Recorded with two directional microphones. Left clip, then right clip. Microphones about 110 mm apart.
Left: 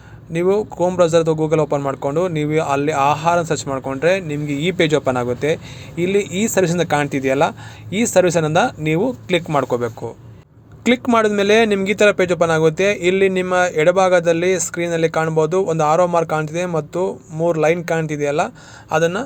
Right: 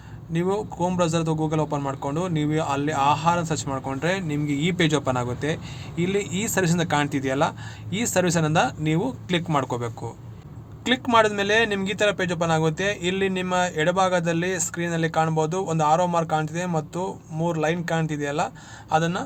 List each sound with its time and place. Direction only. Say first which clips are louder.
0.3 s a man's voice: left 8 dB; 45° left (ahead or behind)